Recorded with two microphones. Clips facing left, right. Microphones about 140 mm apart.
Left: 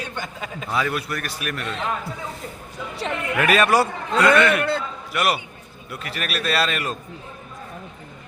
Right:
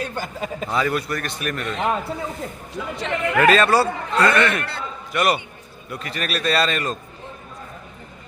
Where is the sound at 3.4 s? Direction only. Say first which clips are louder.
Right 2 dB; 10° left (ahead or behind).